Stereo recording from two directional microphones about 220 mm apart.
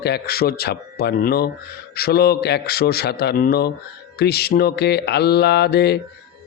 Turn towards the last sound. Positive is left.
turn(degrees=50)  # may be behind; listen again after turning